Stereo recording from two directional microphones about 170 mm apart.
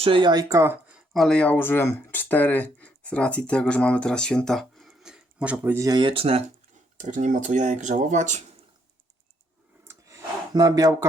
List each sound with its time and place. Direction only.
0.0 s speech: 30° right (ahead or behind); by 0.9 s 15° right (ahead or behind)
1.1 s speech: 5° left (ahead or behind); by 6.4 s 35° right (ahead or behind)
6.9 s speech: 45° right (ahead or behind)
9.8 s a sound: 15° right (ahead or behind)